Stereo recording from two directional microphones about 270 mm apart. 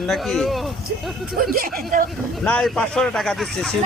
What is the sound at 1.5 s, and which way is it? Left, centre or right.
Speech, right.